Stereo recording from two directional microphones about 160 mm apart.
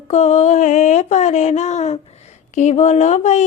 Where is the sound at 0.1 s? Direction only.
45° left (ahead or behind).